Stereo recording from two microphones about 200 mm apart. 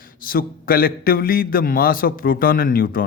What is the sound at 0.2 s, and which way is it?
Speech, 45° left (ahead or behind).